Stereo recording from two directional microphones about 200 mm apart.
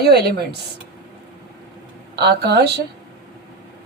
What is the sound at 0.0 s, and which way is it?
Speech, 55° right (ahead or behind).